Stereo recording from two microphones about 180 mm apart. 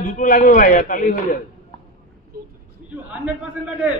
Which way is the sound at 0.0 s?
50° left (ahead or behind).